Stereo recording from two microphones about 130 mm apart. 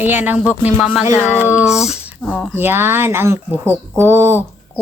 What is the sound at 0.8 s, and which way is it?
Speech, centre (ahead or behind).